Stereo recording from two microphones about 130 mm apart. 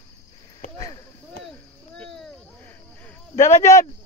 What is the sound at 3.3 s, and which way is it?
Speech, 60° left (ahead or behind).